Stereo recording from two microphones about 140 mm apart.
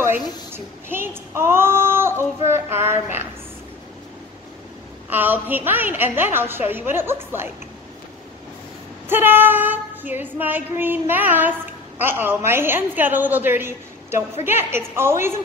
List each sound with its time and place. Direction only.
0.0 s speech: 15° right (ahead or behind)
5.1 s female singing: 15° right (ahead or behind)
9.1 s female singing: 15° right (ahead or behind)